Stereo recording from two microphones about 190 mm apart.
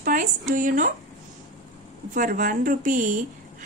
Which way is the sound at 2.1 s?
45° right (ahead or behind).